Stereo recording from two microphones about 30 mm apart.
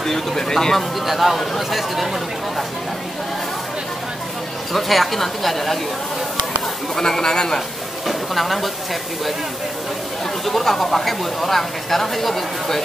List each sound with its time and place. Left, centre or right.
0.0 s speech: centre
1.0 s a woman's voice: centre
4.7 s a woman's voice: centre
7.0 s a man's voice: left
8.1 s a woman's voice: centre
10.4 s speech: centre